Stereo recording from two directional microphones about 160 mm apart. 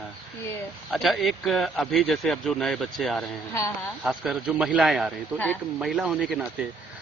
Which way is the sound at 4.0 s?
5° right (ahead or behind).